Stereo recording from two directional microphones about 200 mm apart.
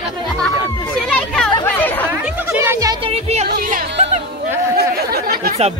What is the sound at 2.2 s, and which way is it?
Music, 10° right (ahead or behind).